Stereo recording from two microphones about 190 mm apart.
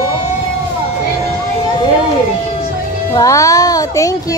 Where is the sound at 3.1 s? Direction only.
15° left (ahead or behind).